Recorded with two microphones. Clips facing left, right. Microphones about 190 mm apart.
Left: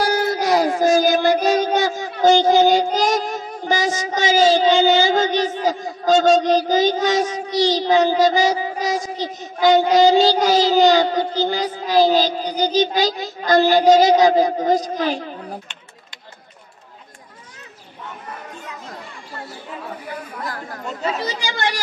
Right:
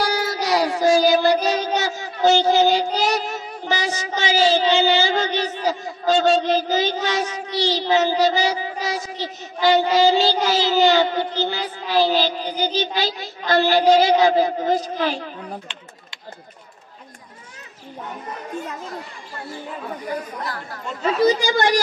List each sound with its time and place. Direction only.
0.0 s a sound: 50° left (ahead or behind)
8.1 s mantra: 45° left (ahead or behind)
9.6 s child singing: 45° left (ahead or behind)
20.4 s child singing: 45° left (ahead or behind)
21.0 s speech: 45° right (ahead or behind)